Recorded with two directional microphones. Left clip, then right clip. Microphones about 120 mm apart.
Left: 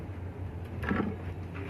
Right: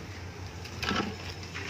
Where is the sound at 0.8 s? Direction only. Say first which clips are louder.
Right 2 dB; 35° right (ahead or behind).